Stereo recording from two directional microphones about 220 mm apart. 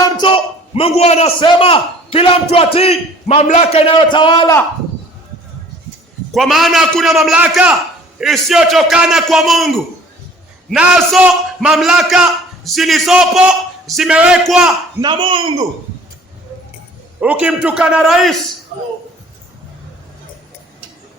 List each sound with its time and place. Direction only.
0.0 s a man's voice: 20° left (ahead or behind)
6.3 s a man's voice: centre (ahead or behind)
15.0 s speech: 25° right (ahead or behind)
17.2 s a man's voice: 5° right (ahead or behind)